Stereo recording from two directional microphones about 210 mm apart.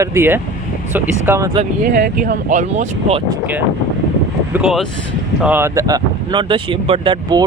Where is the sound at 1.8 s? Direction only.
40° right (ahead or behind).